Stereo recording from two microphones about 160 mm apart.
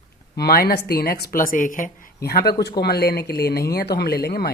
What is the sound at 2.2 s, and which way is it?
Speech, 80° left.